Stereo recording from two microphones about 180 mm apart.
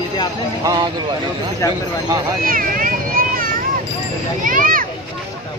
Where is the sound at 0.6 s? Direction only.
20° right (ahead or behind).